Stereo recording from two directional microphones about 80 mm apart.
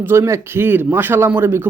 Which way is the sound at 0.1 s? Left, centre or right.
Right.